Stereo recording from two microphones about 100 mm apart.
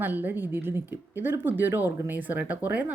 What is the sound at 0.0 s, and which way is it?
Speech, 20° right (ahead or behind).